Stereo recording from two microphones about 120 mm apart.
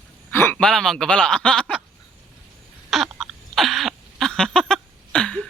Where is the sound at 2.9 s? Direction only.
Centre (ahead or behind).